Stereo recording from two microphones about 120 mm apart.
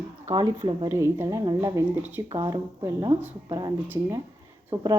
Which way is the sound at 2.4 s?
30° right (ahead or behind).